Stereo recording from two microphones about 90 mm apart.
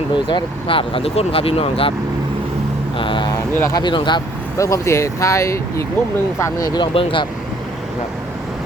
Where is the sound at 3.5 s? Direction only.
30° left (ahead or behind).